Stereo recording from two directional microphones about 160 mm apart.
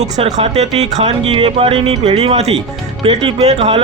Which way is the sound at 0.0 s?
45° right (ahead or behind).